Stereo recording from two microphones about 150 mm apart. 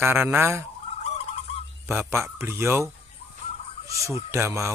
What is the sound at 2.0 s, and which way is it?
Speech, 15° right (ahead or behind).